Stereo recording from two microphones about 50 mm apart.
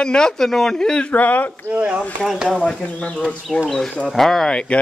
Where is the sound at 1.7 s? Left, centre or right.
Right.